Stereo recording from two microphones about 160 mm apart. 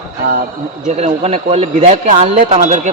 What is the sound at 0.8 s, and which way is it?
Speech, 40° right (ahead or behind).